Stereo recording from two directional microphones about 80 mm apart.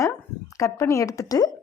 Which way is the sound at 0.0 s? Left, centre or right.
Left.